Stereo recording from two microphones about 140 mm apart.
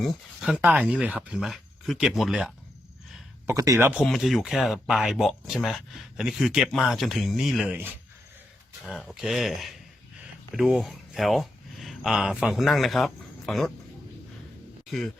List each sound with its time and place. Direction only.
0.0 s speech: centre (ahead or behind)
3.4 s speech: 25° right (ahead or behind)
4.0 s speech: centre (ahead or behind)